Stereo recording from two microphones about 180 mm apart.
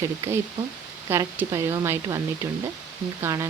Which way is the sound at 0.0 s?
15° right (ahead or behind).